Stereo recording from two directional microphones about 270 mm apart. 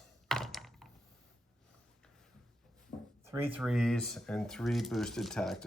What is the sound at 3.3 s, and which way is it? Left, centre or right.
Speech, centre.